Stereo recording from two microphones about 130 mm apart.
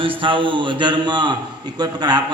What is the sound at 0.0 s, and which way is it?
A man's voice, 40° right (ahead or behind).